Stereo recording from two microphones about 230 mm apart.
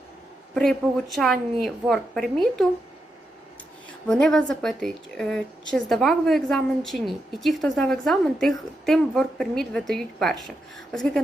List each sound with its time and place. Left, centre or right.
0.5 s a woman's voice: centre
4.0 s a woman's voice: centre